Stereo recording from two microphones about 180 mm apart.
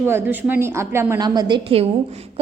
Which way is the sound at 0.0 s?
15° right (ahead or behind).